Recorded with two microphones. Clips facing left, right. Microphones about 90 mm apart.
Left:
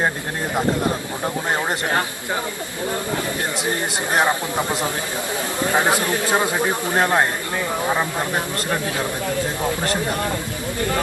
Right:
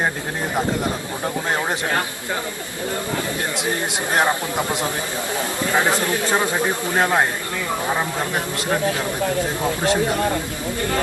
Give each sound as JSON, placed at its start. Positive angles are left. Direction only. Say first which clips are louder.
{"t": 4.1, "sound": "a man's voice", "louder": "even", "side_deg": 15}
{"t": 5.7, "sound": "a man's voice", "louder": "even", "side_deg": 15}